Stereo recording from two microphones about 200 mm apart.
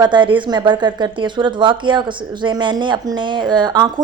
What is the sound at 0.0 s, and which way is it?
A woman's voice, 20° right (ahead or behind).